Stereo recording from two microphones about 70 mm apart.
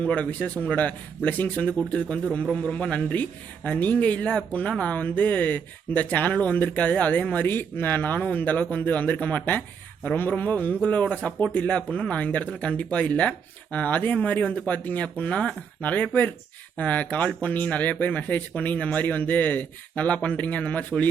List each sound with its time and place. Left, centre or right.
0.0 s speech: centre